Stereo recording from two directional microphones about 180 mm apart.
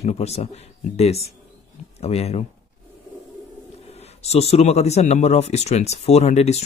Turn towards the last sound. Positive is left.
turn(degrees=35)  # may be behind; listen again after turning